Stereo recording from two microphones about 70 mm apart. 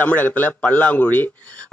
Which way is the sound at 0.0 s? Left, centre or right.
Left.